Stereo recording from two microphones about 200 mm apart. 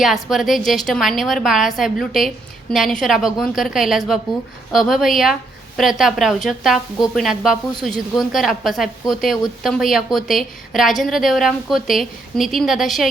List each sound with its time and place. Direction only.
0.0 s a woman's voice: centre (ahead or behind)